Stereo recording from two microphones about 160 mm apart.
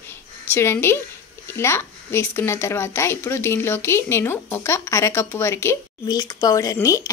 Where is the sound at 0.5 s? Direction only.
15° left (ahead or behind).